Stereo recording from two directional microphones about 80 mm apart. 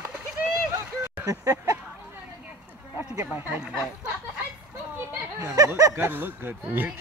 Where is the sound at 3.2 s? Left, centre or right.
Right.